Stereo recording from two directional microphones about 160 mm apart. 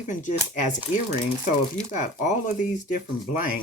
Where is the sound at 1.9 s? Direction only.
50° left (ahead or behind).